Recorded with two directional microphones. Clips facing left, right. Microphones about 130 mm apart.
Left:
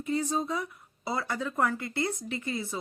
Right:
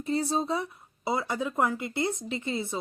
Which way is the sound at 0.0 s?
35° right (ahead or behind).